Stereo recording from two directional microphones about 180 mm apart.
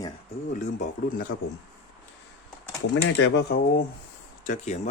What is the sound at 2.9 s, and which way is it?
Speech, 80° left.